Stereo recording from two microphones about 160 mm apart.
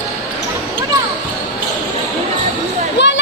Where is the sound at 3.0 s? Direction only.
90° left.